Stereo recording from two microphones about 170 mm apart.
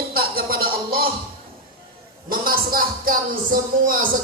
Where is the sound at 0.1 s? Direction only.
60° right (ahead or behind).